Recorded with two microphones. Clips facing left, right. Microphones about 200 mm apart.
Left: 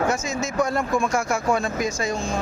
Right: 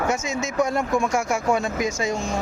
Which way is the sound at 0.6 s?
20° right (ahead or behind).